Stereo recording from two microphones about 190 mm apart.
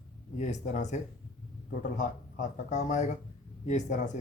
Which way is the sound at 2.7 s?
40° left (ahead or behind).